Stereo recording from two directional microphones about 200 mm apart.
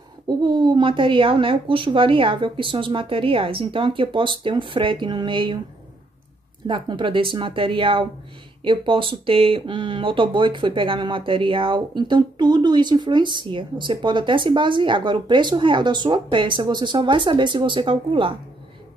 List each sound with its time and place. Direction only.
0.4 s speech: 25° right (ahead or behind)
6.7 s speech: 25° right (ahead or behind)